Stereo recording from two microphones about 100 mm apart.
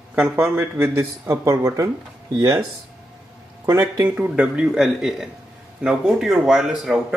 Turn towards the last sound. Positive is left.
turn(degrees=-5)  # may be behind; listen again after turning